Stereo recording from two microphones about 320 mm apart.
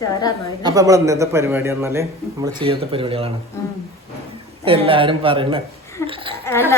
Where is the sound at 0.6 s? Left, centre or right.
Centre.